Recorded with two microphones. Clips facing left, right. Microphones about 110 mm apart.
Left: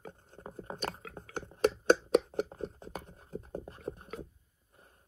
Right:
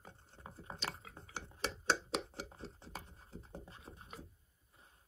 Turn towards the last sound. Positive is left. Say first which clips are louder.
# left 12 dB
turn(degrees=60)  # may be behind; listen again after turning